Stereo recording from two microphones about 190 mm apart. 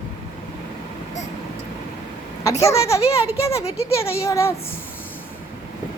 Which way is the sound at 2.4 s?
15° left (ahead or behind).